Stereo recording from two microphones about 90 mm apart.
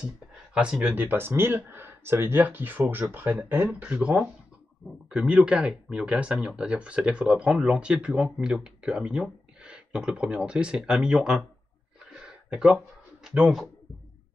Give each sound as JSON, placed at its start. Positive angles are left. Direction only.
{"t": 0.6, "sound": "speech", "side_deg": -10}
{"t": 12.1, "sound": "a sound", "side_deg": -5}
{"t": 13.3, "sound": "speech", "side_deg": -5}